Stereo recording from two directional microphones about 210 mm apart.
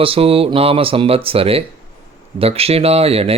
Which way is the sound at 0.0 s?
25° right (ahead or behind).